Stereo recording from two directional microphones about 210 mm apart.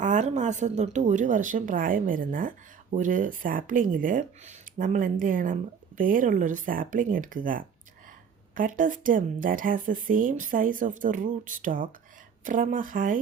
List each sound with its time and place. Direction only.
0.0 s speech: 35° right (ahead or behind)